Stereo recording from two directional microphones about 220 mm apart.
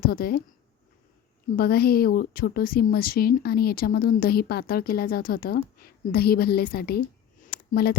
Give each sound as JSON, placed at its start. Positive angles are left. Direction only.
{"t": 0.0, "sound": "a woman's voice", "side_deg": 45}
{"t": 1.5, "sound": "a woman's voice", "side_deg": 45}
{"t": 7.4, "sound": "a sound", "side_deg": 40}